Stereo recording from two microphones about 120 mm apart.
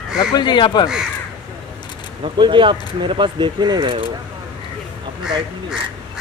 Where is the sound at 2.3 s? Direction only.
40° right (ahead or behind).